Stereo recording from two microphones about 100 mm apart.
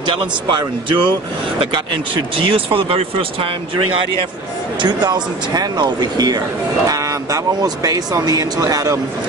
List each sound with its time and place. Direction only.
0.0 s speech: 55° right (ahead or behind)
2.3 s speech: 60° right (ahead or behind)
4.8 s speech: 45° right (ahead or behind)